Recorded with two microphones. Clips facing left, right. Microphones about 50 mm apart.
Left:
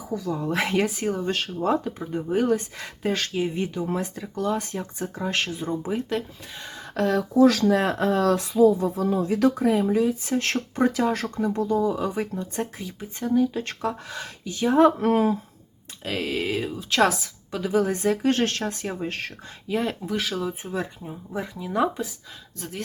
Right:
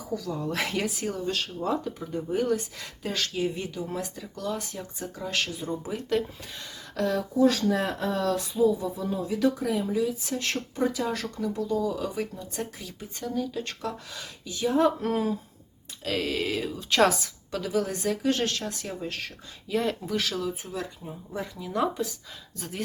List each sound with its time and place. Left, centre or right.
0.1 s speech: left
5.9 s speech: centre
6.9 s speech: left
7.3 s speech: left
7.8 s speech: left
12.8 s speech: left
16.0 s speech: centre
16.9 s a woman's voice: centre
17.6 s speech: left
19.6 s speech: centre